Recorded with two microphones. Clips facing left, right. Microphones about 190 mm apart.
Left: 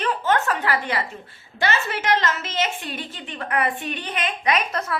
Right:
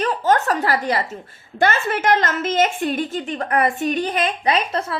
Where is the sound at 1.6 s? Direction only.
50° right (ahead or behind).